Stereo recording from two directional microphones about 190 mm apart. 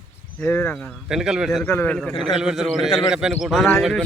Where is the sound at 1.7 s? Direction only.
10° left (ahead or behind).